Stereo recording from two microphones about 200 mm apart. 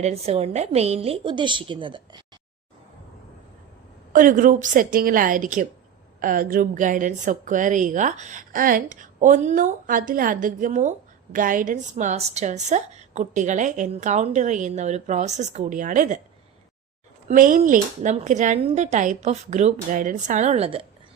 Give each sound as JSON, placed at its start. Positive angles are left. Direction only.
{"t": 0.0, "sound": "a woman's voice", "side_deg": -30}
{"t": 4.1, "sound": "a woman's voice", "side_deg": -45}
{"t": 17.2, "sound": "a woman's voice", "side_deg": -40}